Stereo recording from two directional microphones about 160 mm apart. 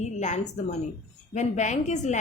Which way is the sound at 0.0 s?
45° left (ahead or behind).